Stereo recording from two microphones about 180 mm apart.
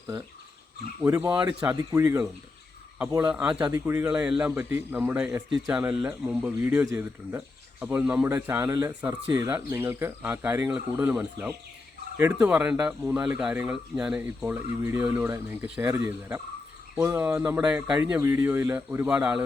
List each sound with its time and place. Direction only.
1.0 s speech: 15° right (ahead or behind)